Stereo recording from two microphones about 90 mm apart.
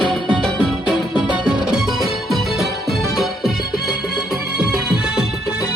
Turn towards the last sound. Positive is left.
turn(degrees=-5)  # may be behind; listen again after turning